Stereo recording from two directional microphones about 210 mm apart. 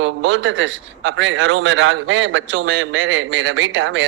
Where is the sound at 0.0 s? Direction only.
65° right (ahead or behind).